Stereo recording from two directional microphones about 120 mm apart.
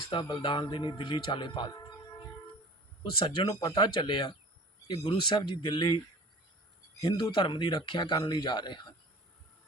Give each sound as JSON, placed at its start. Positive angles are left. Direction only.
{"t": 0.1, "sound": "speech", "side_deg": 40}
{"t": 3.0, "sound": "speech", "side_deg": 45}
{"t": 7.0, "sound": "speech", "side_deg": 40}